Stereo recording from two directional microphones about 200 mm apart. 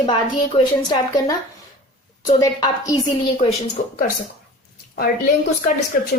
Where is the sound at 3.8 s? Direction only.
45° left (ahead or behind).